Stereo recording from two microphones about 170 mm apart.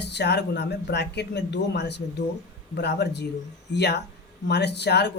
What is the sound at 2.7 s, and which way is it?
Speech, 75° left (ahead or behind).